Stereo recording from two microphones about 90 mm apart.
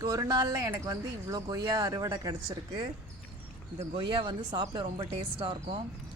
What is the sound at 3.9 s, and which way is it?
Speech, 70° right (ahead or behind).